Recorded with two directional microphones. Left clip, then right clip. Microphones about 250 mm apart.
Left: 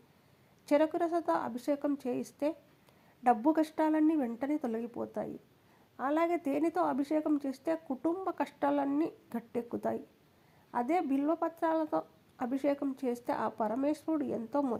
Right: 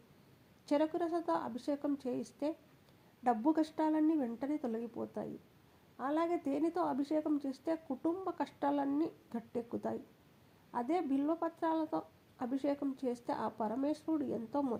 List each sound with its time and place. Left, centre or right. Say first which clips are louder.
0.6 s speech: left 5 dB; left